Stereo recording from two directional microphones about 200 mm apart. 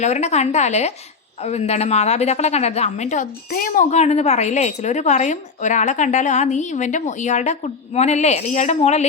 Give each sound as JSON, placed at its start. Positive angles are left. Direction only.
{"t": 0.0, "sound": "a woman's voice", "side_deg": 35}